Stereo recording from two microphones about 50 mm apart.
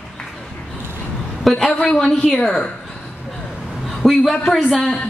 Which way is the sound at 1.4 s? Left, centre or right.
Centre.